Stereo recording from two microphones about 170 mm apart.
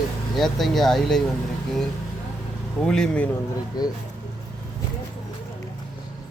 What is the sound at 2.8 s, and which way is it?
Speech, 5° left (ahead or behind).